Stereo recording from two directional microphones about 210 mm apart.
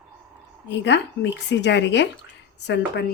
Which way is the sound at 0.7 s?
55° left (ahead or behind).